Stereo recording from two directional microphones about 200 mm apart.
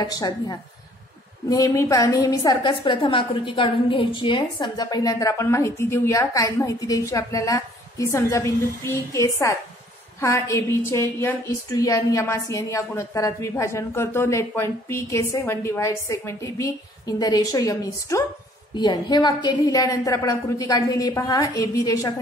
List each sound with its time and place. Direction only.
0.0 s a woman's voice: 20° left (ahead or behind)